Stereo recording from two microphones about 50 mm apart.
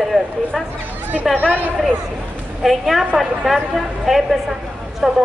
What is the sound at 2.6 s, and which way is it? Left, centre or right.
Speech, centre.